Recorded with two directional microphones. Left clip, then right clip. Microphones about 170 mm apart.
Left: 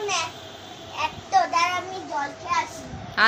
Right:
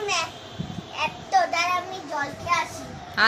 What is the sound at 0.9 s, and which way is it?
Child singing, 5° right (ahead or behind).